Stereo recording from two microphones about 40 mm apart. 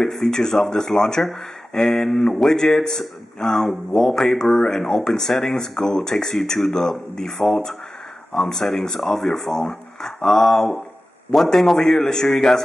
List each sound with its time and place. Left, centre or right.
0.0 s speech: centre